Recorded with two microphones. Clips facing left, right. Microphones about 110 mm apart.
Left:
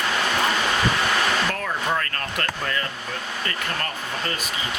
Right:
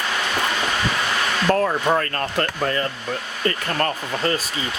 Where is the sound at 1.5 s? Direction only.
35° right (ahead or behind).